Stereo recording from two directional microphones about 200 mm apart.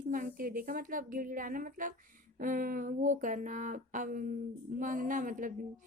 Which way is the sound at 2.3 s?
45° right (ahead or behind).